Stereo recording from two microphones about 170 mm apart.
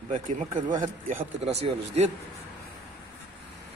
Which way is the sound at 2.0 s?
40° right (ahead or behind).